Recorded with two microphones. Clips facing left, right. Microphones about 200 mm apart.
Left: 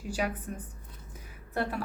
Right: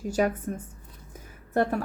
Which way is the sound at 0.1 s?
45° right (ahead or behind).